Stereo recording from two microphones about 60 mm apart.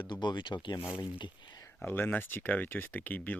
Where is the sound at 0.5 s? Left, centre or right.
Left.